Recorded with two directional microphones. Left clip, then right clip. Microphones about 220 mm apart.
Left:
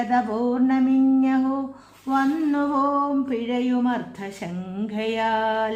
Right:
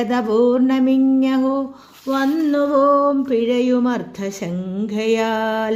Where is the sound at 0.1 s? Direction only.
20° right (ahead or behind).